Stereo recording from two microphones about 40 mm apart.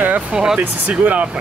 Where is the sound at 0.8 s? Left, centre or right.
Right.